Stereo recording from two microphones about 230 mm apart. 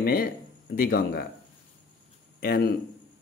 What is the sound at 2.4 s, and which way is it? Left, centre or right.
Speech, left.